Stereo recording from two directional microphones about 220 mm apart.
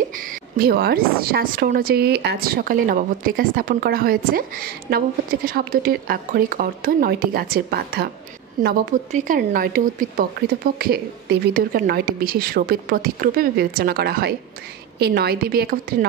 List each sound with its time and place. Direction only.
0.1 s a woman's voice: 40° right (ahead or behind)